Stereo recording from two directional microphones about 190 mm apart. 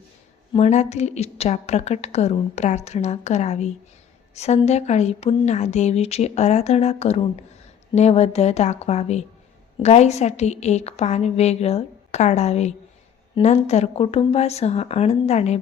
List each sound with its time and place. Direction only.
0.5 s a woman's voice: 35° left (ahead or behind)